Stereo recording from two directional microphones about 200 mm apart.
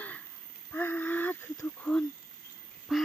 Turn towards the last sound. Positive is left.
turn(degrees=0)  # may be behind; listen again after turning